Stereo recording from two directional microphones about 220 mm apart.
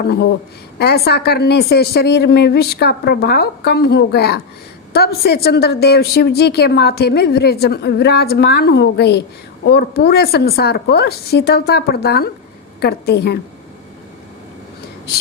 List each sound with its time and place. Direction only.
0.8 s a woman's voice: 45° left (ahead or behind)